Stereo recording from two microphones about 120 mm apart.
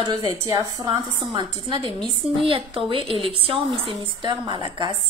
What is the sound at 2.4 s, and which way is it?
A woman's voice, 50° right (ahead or behind).